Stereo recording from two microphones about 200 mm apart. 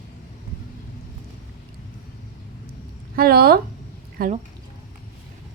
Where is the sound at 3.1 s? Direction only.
50° right (ahead or behind).